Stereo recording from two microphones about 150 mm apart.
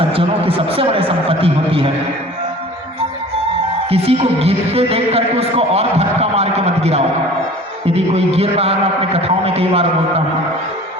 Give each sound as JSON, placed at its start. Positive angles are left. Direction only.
{"t": 0.0, "sound": "speech", "side_deg": -40}
{"t": 3.8, "sound": "a man's voice", "side_deg": -40}